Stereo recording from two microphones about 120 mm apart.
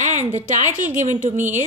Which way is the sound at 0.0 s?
90° right.